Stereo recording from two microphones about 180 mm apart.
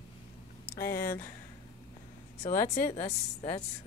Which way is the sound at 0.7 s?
55° left (ahead or behind).